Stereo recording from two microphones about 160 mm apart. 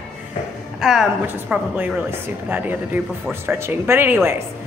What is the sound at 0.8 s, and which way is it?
A woman's voice, 5° right (ahead or behind).